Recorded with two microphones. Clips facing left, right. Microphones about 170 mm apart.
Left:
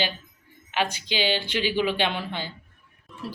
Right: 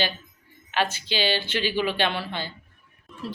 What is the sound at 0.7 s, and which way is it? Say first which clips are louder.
Speech: right 1 dB; 15° left (ahead or behind).